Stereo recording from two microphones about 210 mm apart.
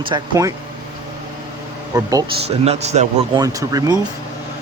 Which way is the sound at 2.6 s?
30° right (ahead or behind).